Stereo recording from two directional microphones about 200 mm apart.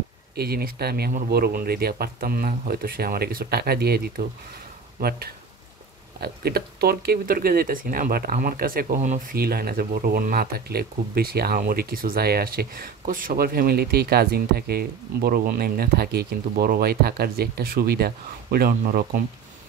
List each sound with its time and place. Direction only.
0.4 s speech: 50° right (ahead or behind)